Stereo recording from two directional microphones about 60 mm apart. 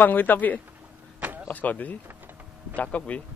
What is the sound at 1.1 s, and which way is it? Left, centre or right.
Vehicle, right.